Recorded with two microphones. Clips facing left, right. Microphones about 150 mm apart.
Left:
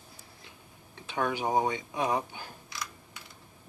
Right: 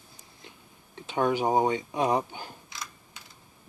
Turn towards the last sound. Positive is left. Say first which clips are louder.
# left 2 dB
turn(degrees=-20)  # may be behind; listen again after turning